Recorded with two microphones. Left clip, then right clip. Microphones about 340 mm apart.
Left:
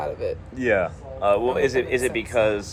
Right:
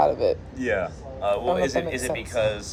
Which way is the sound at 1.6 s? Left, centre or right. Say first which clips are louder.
Left 3 dB; centre.